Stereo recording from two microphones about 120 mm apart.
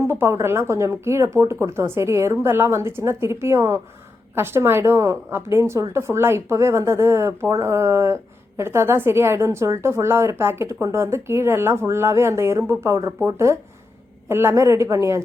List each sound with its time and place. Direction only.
0.0 s speech: 20° right (ahead or behind)